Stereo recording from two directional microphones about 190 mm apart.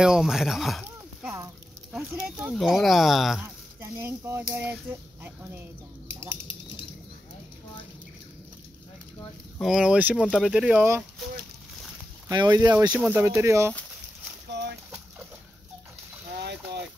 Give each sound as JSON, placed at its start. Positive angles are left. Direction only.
{"t": 0.0, "sound": "speech", "side_deg": -5}
{"t": 0.8, "sound": "a sound", "side_deg": -5}
{"t": 1.4, "sound": "speech", "side_deg": -5}
{"t": 9.6, "sound": "speech", "side_deg": 0}
{"t": 12.3, "sound": "speech", "side_deg": -20}